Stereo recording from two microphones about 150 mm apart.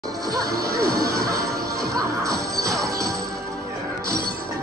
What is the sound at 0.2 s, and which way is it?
Music, 25° right (ahead or behind).